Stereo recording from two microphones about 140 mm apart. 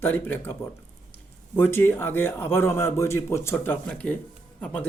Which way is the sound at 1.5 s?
15° left (ahead or behind).